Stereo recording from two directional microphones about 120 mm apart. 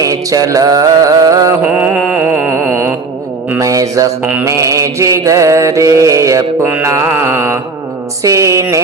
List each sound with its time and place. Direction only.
0.0 s mantra: 30° right (ahead or behind)
1.7 s mantra: 15° right (ahead or behind)
2.1 s a sound: 20° right (ahead or behind)
3.6 s mantra: 30° right (ahead or behind)